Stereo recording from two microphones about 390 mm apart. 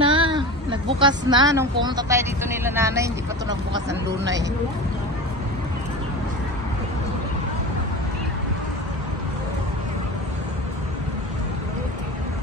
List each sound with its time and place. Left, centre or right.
0.0 s a sound: centre
0.9 s speech: centre
3.9 s speech: right